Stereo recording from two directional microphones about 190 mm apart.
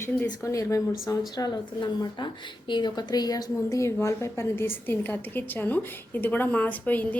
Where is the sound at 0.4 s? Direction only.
15° left (ahead or behind).